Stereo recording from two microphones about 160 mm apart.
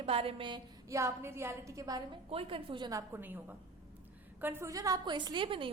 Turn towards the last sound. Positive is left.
turn(degrees=-35)  # may be behind; listen again after turning